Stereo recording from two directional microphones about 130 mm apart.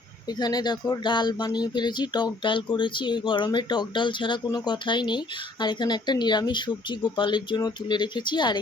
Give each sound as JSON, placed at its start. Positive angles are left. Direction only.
{"t": 0.3, "sound": "speech", "side_deg": 30}